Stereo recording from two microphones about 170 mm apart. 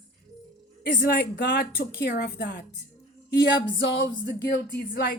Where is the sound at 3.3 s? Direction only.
80° left.